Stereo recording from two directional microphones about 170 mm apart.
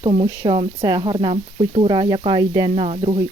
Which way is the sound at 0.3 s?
30° right (ahead or behind).